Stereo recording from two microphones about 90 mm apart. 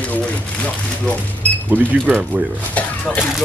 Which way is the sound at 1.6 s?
20° right (ahead or behind).